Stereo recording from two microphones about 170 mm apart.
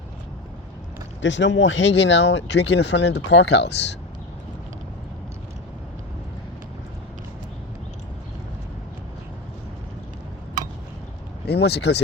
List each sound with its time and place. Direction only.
1.2 s speech: 90° left
11.4 s speech: 75° left (ahead or behind)